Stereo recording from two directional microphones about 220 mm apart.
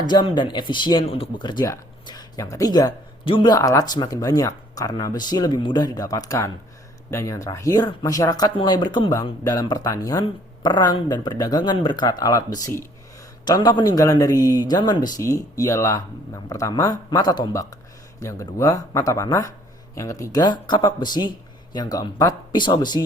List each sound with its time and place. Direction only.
0.1 s speech: 20° left (ahead or behind)